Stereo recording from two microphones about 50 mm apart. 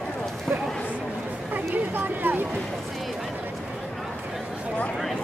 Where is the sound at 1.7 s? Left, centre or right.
Right.